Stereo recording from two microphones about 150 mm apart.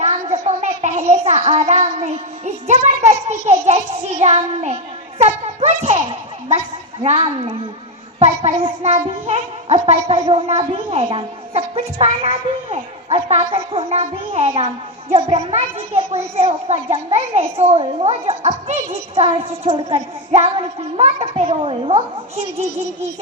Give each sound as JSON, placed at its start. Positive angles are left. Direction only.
{"t": 0.0, "sound": "a child's voice", "side_deg": -45}